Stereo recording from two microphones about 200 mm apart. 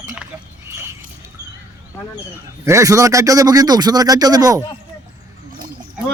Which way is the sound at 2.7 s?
15° right (ahead or behind).